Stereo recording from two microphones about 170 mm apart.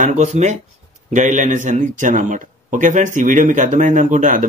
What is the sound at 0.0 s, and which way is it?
Speech, 45° right (ahead or behind).